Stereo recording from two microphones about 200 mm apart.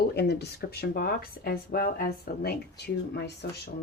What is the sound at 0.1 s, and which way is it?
Speech, 55° left (ahead or behind).